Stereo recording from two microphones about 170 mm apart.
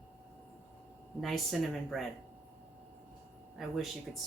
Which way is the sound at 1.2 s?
Centre (ahead or behind).